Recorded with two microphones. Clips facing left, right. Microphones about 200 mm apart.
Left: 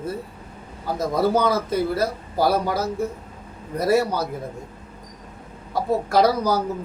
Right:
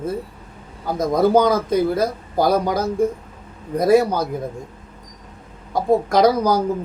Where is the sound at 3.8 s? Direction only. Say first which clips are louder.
Right 5 dB; 15° right (ahead or behind).